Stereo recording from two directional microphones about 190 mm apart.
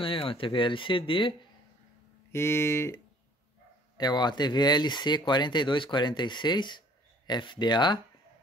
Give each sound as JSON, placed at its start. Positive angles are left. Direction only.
{"t": 0.0, "sound": "speech", "side_deg": 30}
{"t": 2.3, "sound": "speech", "side_deg": 15}
{"t": 4.0, "sound": "speech", "side_deg": 25}